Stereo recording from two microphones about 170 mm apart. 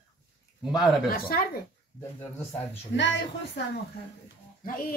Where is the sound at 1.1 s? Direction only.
60° left (ahead or behind).